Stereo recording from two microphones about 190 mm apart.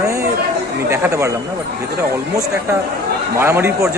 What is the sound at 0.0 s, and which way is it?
Chatter, 15° right (ahead or behind).